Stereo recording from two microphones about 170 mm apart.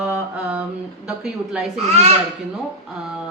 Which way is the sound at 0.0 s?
5° right (ahead or behind).